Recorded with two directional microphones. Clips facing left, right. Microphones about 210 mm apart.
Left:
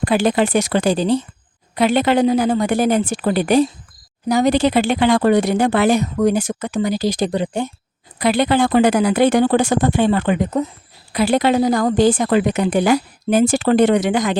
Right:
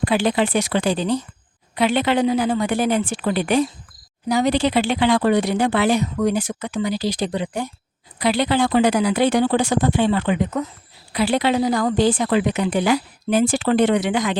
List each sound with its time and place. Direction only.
0.0 s a woman's voice: 45° left (ahead or behind)